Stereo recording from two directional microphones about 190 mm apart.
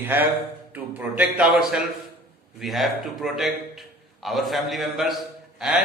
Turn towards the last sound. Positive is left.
turn(degrees=-5)  # may be behind; listen again after turning